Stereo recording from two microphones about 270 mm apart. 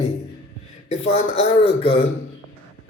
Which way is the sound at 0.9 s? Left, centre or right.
Left.